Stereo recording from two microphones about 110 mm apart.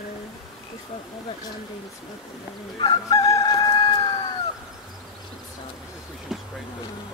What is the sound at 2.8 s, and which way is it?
Chicken, 40° left (ahead or behind).